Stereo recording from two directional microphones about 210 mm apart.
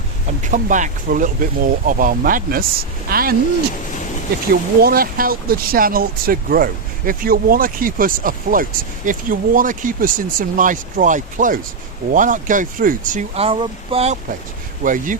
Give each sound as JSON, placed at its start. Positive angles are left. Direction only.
{"t": 0.4, "sound": "speech", "side_deg": -35}
{"t": 4.8, "sound": "speech", "side_deg": -45}